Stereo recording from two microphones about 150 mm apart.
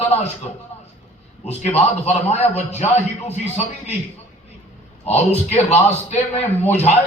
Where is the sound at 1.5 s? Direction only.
45° left (ahead or behind).